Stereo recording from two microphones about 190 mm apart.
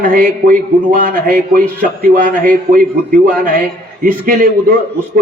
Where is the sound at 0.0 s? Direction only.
50° right (ahead or behind).